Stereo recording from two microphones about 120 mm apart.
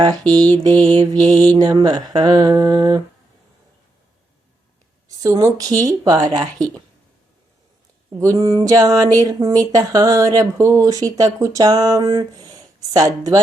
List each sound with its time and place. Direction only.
0.0 s speech: 35° right (ahead or behind)
0.3 s mantra: 15° left (ahead or behind)
0.6 s speech: 35° right (ahead or behind)
5.0 s speech: 30° right (ahead or behind)
8.1 s speech: 30° right (ahead or behind)